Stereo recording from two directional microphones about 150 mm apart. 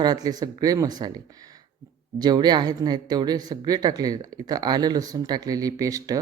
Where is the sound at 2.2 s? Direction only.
25° right (ahead or behind).